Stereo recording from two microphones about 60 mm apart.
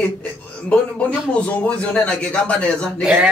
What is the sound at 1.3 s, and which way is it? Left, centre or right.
A man's voice, centre.